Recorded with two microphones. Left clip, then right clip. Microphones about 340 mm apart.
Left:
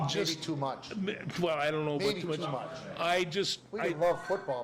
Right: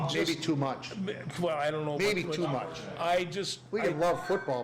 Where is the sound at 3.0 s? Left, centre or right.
Left.